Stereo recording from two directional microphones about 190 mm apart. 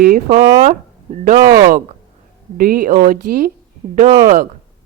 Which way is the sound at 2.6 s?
50° right (ahead or behind).